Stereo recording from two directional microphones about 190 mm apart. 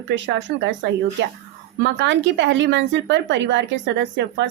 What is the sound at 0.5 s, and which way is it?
Speech, 70° right (ahead or behind).